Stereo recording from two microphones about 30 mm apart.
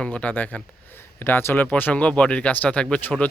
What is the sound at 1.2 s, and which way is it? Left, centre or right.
Speech, left.